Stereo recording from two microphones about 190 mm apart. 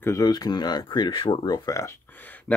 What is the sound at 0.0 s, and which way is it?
Speech, 15° left (ahead or behind).